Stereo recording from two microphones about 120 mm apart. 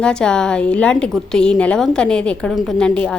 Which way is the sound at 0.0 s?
5° left (ahead or behind).